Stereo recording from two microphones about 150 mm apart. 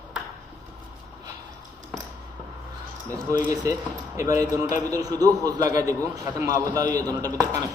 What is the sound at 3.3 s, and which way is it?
A man's voice, 25° right (ahead or behind).